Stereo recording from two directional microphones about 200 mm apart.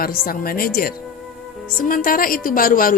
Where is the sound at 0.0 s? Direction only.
45° left (ahead or behind).